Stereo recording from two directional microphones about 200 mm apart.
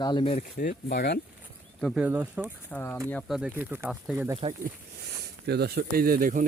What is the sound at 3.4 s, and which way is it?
Speech, 5° right (ahead or behind).